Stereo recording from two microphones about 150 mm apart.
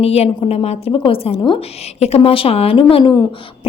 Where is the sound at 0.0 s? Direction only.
40° left (ahead or behind).